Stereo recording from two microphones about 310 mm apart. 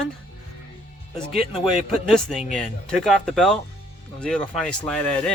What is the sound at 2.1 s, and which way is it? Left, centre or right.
Speech, centre.